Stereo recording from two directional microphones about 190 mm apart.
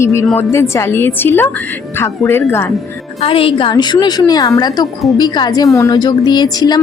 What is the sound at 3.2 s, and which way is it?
A woman's voice, 30° left (ahead or behind).